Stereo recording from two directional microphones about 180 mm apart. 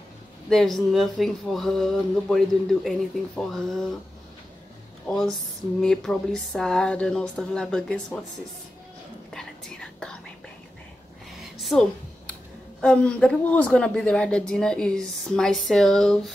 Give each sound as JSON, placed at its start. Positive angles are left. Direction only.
{"t": 0.5, "sound": "speech", "side_deg": 0}
{"t": 5.0, "sound": "speech", "side_deg": 5}
{"t": 9.3, "sound": "whispering", "side_deg": 5}
{"t": 11.7, "sound": "speech", "side_deg": 0}